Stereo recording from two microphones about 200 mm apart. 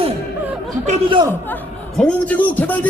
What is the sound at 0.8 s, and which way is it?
Speech, 25° right (ahead or behind).